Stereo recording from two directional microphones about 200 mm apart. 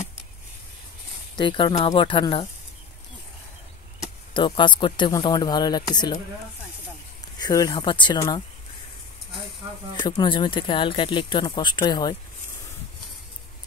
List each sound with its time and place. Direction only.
1.3 s speech: 25° left (ahead or behind)
4.0 s speech: 25° left (ahead or behind)
7.3 s speech: 20° left (ahead or behind)
9.9 s speech: 20° left (ahead or behind)